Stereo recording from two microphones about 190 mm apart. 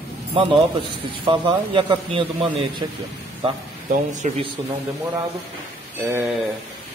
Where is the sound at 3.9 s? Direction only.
40° right (ahead or behind).